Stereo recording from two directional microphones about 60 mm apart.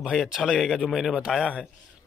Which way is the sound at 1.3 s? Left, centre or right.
Centre.